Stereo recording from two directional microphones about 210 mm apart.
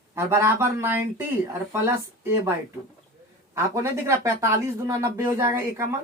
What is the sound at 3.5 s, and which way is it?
Speech, 15° right (ahead or behind).